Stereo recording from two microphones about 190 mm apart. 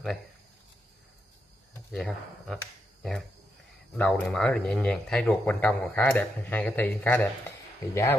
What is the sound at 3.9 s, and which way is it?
Speech, 10° left (ahead or behind).